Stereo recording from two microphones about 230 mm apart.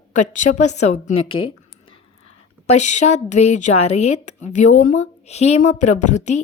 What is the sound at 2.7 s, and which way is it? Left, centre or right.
A woman's voice, left.